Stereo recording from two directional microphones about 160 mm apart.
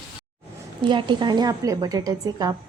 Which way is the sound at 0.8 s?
30° right (ahead or behind).